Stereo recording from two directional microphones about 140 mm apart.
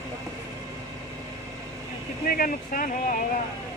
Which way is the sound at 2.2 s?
85° left.